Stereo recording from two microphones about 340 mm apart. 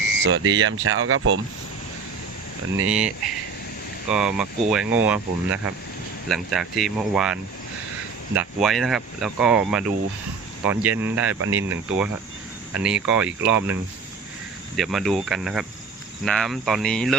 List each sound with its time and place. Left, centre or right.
0.1 s speech: right
2.8 s speech: centre
4.1 s speech: centre
8.4 s speech: centre
14.8 s speech: centre